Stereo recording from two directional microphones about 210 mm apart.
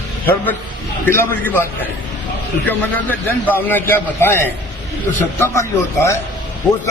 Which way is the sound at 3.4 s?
10° left (ahead or behind).